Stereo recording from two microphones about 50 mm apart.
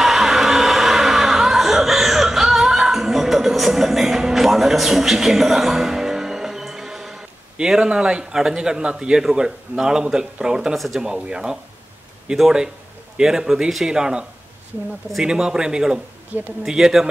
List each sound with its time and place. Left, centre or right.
0.0 s chuckle: centre
7.5 s speech: centre
15.2 s speech: centre
16.3 s speech: right
16.6 s speech: centre